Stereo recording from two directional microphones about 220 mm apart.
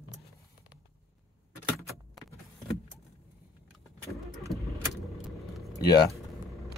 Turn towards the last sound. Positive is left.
turn(degrees=20)  # may be behind; listen again after turning